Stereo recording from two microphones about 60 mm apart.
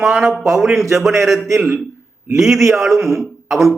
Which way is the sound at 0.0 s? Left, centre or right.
Centre.